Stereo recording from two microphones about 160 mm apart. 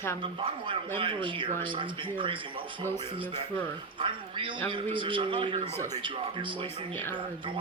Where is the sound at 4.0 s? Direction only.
35° right (ahead or behind).